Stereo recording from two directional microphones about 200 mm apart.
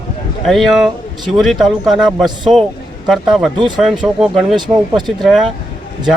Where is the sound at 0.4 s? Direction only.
Centre (ahead or behind).